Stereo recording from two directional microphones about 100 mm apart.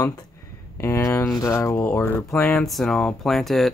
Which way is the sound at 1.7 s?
15° left (ahead or behind).